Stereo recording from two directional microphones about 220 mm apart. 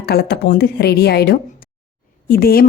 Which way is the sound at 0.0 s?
45° left (ahead or behind).